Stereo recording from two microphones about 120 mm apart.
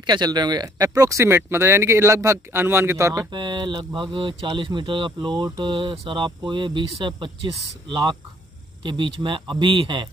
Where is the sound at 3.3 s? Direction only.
40° right (ahead or behind).